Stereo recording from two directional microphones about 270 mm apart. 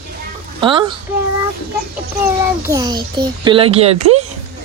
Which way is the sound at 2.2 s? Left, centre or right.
Centre.